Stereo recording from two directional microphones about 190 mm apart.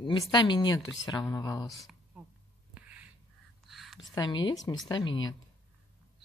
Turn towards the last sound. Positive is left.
turn(degrees=25)  # may be behind; listen again after turning